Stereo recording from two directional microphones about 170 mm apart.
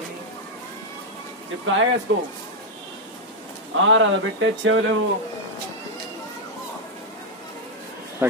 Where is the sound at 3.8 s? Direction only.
90° right.